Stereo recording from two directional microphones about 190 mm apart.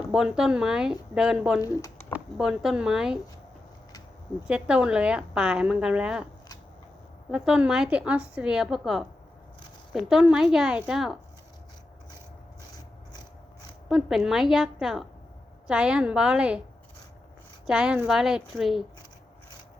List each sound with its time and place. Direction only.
0.1 s a woman's voice: 5° right (ahead or behind)
1.6 s speech: 15° left (ahead or behind)
2.1 s a woman's voice: 5° right (ahead or behind)
4.4 s a woman's voice: 5° right (ahead or behind)
7.3 s a woman's voice: 5° right (ahead or behind)
13.8 s a woman's voice: centre (ahead or behind)
17.7 s a woman's voice: 5° right (ahead or behind)